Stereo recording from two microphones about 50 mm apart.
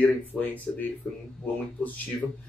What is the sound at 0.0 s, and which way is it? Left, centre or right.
Speech, left.